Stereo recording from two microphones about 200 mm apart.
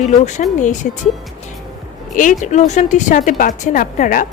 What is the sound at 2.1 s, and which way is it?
A woman's voice, 40° left (ahead or behind).